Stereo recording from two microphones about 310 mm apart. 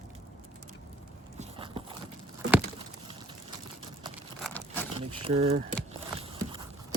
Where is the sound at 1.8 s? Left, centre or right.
Centre.